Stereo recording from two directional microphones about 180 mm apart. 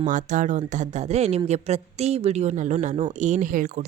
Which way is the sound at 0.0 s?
45° right (ahead or behind).